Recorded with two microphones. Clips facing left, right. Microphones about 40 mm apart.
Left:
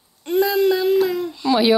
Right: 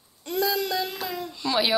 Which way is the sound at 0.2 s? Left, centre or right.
Left.